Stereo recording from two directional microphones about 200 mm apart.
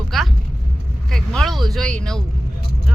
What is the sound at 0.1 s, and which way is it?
Vehicle, centre (ahead or behind).